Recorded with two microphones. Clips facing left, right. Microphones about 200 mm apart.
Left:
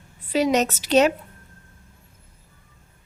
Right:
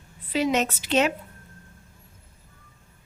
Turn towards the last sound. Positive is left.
turn(degrees=40)  # may be behind; listen again after turning